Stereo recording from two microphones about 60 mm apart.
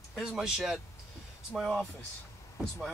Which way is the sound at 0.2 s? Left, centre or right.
Centre.